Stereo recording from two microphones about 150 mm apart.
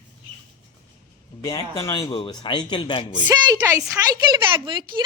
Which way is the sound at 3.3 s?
20° right (ahead or behind).